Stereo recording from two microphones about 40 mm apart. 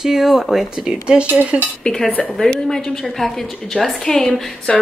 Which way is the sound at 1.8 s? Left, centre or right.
Centre.